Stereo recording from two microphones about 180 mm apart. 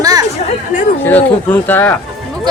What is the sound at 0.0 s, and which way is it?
Chatter, 20° right (ahead or behind).